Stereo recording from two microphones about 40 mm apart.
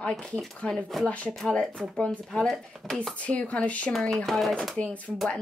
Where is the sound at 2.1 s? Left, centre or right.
Centre.